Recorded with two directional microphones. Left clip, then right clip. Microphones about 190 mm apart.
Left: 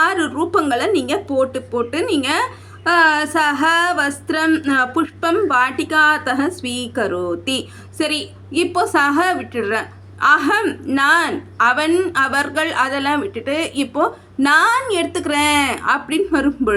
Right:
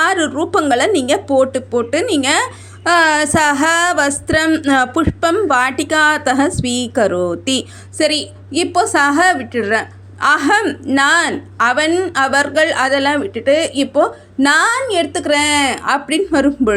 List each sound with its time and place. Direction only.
0.0 s speech: 25° right (ahead or behind)